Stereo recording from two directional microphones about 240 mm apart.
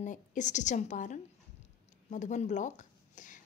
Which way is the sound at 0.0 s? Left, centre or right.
Left.